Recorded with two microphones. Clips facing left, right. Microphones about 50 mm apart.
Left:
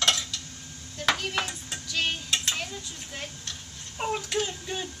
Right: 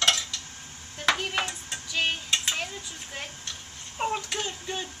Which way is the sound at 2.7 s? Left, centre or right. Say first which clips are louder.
Even; centre.